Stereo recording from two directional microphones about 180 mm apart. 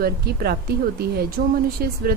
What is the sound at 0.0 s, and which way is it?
Speech, 60° right (ahead or behind).